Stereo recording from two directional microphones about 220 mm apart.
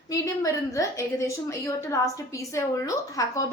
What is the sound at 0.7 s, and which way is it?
A woman's voice, 15° left (ahead or behind).